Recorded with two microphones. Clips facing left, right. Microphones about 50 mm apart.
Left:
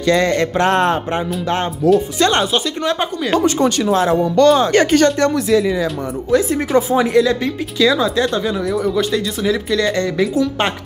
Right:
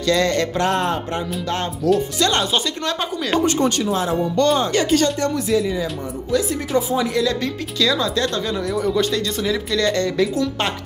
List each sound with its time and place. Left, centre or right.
0.0 s music: left
0.7 s music: left
1.8 s music: left
2.5 s speech: centre
3.3 s speech: left
4.7 s music: left
5.5 s speech: left
6.3 s speech: left
7.2 s speech: left